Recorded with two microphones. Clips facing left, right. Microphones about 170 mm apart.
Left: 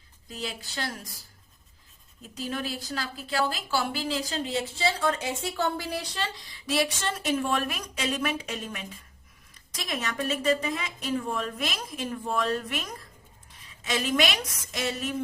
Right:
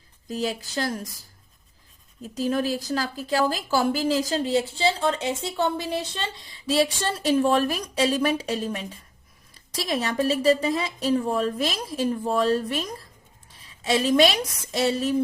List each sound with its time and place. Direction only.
0.3 s a woman's voice: 40° right (ahead or behind)
2.2 s a woman's voice: 40° right (ahead or behind)